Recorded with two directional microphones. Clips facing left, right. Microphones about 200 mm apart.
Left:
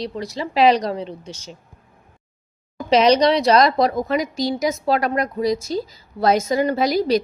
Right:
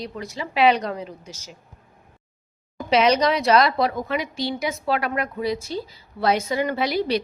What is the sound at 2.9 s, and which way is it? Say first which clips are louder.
A woman's voice: left 4 dB; 35° left (ahead or behind).